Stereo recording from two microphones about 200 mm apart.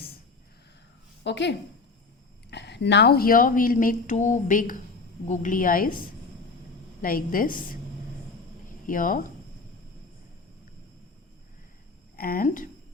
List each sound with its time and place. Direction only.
1.2 s a woman's voice: 60° left (ahead or behind); by 5.9 s 45° left (ahead or behind)
7.0 s a woman's voice: 45° left (ahead or behind)
8.9 s a woman's voice: 45° left (ahead or behind)
12.1 s speech: 50° left (ahead or behind)